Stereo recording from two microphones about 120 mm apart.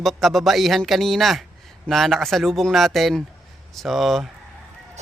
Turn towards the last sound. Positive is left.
turn(degrees=0)  # may be behind; listen again after turning